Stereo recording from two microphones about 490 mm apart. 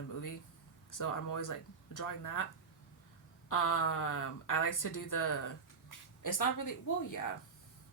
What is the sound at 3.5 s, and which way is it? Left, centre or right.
Speech, left.